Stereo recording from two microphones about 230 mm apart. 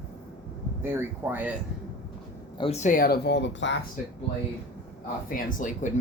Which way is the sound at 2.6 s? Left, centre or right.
Left.